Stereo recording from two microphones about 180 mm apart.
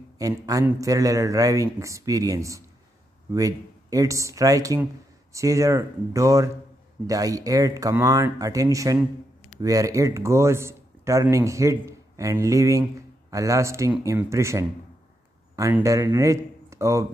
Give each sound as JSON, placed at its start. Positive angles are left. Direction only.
{"t": 0.2, "sound": "a man's voice", "side_deg": -20}